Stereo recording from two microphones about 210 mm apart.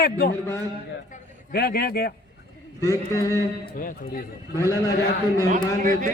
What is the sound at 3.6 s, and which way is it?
Speech, 40° left (ahead or behind).